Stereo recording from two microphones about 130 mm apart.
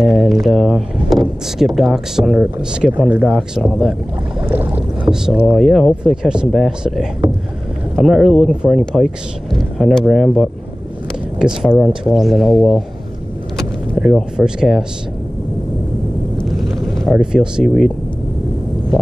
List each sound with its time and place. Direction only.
0.0 s speech: centre (ahead or behind)
3.3 s speech: centre (ahead or behind)
4.5 s rowboat: 15° right (ahead or behind)
5.0 s speech: 5° right (ahead or behind)
16.9 s speech: centre (ahead or behind)